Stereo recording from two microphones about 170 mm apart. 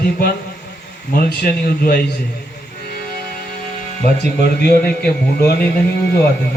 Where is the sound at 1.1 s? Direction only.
65° left (ahead or behind).